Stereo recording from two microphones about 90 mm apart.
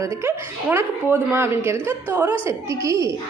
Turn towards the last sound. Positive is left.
turn(degrees=-35)  # may be behind; listen again after turning